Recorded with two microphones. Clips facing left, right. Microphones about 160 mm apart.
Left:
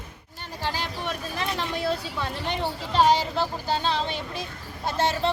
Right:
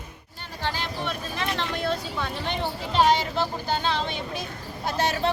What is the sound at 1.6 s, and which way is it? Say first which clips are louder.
Speech: left 1 dB; 5° left (ahead or behind).